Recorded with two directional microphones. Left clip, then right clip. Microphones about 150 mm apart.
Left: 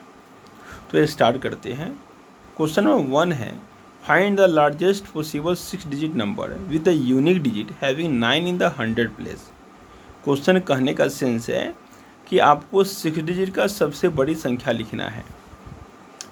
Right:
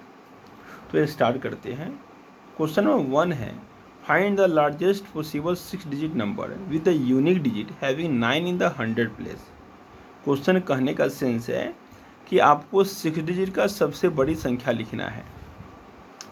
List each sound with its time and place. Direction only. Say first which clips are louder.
0.9 s speech: left 4 dB; 25° left (ahead or behind)